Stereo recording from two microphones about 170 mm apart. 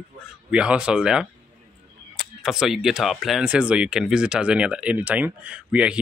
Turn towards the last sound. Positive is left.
turn(degrees=-5)  # may be behind; listen again after turning